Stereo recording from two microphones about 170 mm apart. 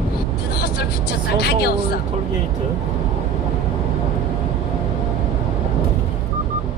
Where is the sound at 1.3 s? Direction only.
70° left (ahead or behind).